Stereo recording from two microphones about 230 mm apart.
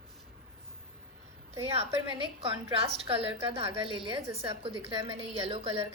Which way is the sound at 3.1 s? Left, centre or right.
Right.